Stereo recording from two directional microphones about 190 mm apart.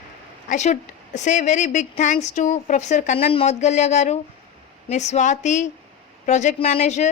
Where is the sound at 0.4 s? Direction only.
40° left (ahead or behind).